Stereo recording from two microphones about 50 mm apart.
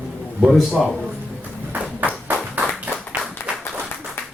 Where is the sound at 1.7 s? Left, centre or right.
Right.